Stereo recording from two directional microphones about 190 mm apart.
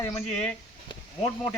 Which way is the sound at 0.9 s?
20° left (ahead or behind).